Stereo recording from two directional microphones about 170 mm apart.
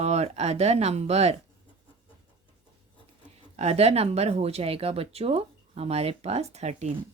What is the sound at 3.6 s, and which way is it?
Speech, 40° right (ahead or behind).